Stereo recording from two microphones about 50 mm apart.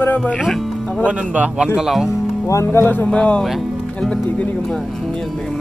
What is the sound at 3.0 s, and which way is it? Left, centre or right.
Speech, left.